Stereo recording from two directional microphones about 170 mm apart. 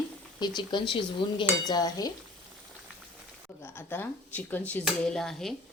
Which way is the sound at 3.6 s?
15° left (ahead or behind).